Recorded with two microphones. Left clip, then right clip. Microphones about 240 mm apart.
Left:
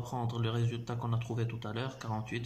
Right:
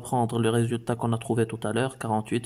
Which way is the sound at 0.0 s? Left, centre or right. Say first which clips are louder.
Right 12 dB; right.